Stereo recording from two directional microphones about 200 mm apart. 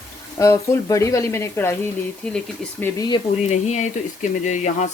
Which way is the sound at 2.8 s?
20° left (ahead or behind).